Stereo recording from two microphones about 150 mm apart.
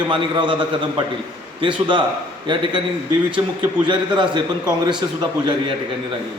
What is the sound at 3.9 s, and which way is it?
A man's voice, 30° right (ahead or behind).